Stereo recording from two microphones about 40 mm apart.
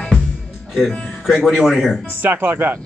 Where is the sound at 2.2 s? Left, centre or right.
Right.